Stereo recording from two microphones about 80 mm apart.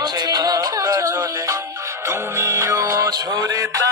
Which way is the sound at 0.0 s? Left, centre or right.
Right.